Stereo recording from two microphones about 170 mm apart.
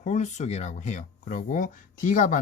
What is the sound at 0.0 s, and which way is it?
Speech, 45° left (ahead or behind).